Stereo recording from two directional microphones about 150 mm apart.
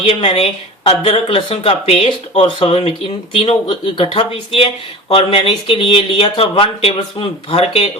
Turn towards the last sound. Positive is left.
turn(degrees=40)  # may be behind; listen again after turning